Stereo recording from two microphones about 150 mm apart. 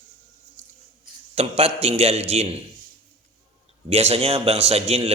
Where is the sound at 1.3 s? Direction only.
40° right (ahead or behind).